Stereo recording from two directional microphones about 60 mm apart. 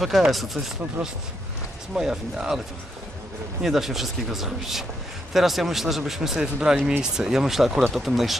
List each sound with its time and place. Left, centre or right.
0.0 s speech: centre
1.0 s speech: right
2.0 s speech: centre
3.6 s speech: centre